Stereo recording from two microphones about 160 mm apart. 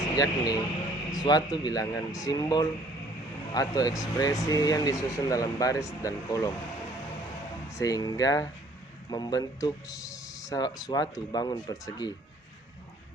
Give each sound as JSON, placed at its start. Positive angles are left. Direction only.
{"t": 0.2, "sound": "speech", "side_deg": 25}
{"t": 7.7, "sound": "speech", "side_deg": 20}